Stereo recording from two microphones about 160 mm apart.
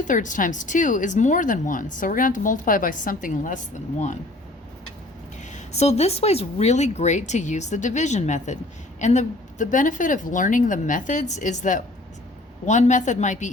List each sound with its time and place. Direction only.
0.0 s speech: 50° left (ahead or behind)
5.5 s speech: 45° left (ahead or behind)